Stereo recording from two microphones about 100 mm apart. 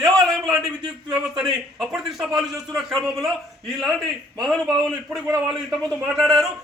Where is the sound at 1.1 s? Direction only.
5° right (ahead or behind).